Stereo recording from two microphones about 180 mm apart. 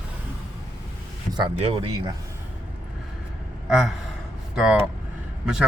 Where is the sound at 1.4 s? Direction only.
30° right (ahead or behind).